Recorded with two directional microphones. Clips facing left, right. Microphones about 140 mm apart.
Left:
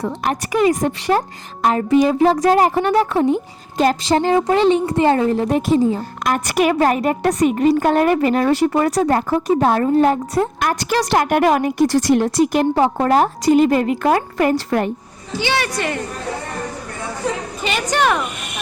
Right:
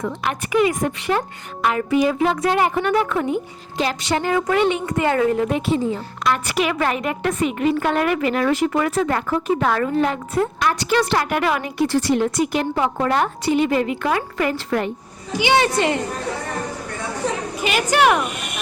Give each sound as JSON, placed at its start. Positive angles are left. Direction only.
{"t": 0.0, "sound": "a woman's voice", "side_deg": 40}
{"t": 15.3, "sound": "a woman's voice", "side_deg": -15}
{"t": 17.6, "sound": "a woman's voice", "side_deg": -5}